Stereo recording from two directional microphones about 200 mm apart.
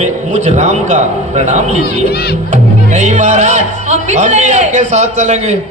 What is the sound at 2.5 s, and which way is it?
Speech, 35° right (ahead or behind).